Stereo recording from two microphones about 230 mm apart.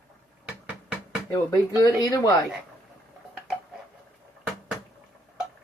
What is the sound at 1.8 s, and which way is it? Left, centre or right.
Speech, centre.